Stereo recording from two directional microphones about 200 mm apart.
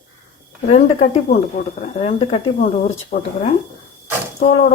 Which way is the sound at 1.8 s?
30° left (ahead or behind).